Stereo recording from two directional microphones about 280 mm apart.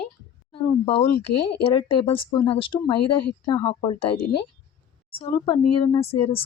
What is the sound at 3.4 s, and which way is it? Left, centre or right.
Speech, centre.